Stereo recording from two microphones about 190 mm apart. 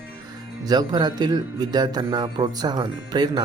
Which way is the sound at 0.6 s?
20° right (ahead or behind).